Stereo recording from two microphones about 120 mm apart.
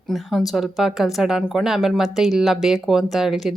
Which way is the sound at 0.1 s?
Centre (ahead or behind).